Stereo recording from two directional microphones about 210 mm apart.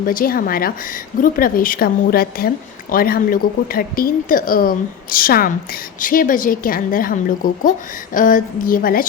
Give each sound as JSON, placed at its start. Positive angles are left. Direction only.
{"t": 0.0, "sound": "a woman's voice", "side_deg": 40}